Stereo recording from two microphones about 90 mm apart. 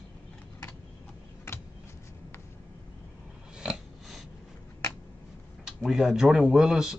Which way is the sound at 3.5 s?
5° right (ahead or behind).